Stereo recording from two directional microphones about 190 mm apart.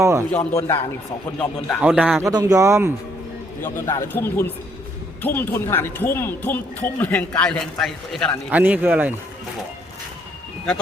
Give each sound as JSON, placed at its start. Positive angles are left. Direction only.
{"t": 0.0, "sound": "a man's voice", "side_deg": -15}
{"t": 1.4, "sound": "speech", "side_deg": 10}
{"t": 1.8, "sound": "a man's voice", "side_deg": -5}
{"t": 2.3, "sound": "a man's voice", "side_deg": -20}
{"t": 3.6, "sound": "speech", "side_deg": 15}
{"t": 8.4, "sound": "a man's voice", "side_deg": -10}